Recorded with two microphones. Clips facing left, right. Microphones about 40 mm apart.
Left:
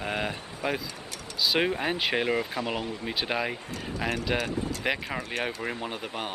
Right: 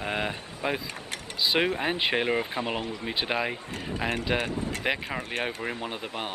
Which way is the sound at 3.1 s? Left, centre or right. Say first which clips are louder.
Right 1 dB; centre.